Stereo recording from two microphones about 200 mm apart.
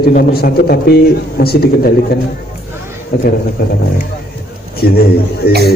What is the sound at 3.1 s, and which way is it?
Speech, 50° left (ahead or behind).